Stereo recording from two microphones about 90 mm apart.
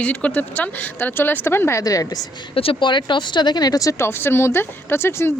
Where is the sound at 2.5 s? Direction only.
75° left (ahead or behind); by 4.1 s 40° left (ahead or behind).